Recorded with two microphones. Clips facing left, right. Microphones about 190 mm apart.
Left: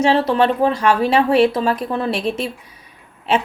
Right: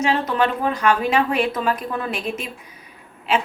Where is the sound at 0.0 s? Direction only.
30° left (ahead or behind).